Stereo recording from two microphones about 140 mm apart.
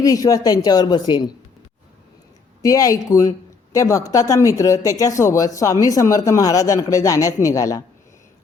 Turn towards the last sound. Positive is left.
turn(degrees=25)  # may be behind; listen again after turning